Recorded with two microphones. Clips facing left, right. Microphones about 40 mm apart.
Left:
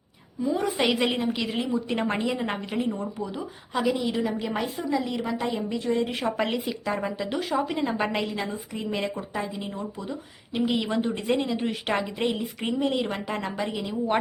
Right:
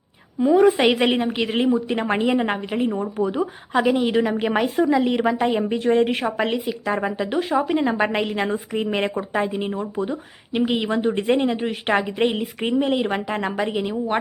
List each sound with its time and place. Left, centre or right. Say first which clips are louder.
0.3 s a woman's voice: right 10 dB; right
0.6 s a woman's voice: right 6 dB; right
3.2 s a woman's voice: right 10 dB; right
6.2 s speech: right 4 dB; right
6.8 s speech: right 5 dB; right
8.2 s a woman's voice: right 7 dB; right
11.6 s speech: right 5 dB; centre
11.9 s a woman's voice: right 6 dB; right